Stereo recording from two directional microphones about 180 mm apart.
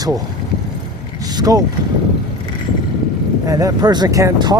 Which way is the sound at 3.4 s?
20° right (ahead or behind).